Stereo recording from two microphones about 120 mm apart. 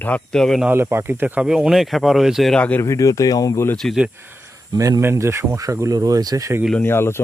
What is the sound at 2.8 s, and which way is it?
Speech, 25° left (ahead or behind).